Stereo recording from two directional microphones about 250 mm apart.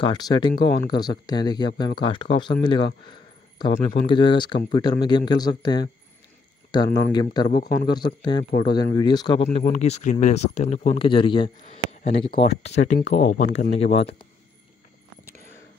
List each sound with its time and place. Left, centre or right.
0.0 s speech: centre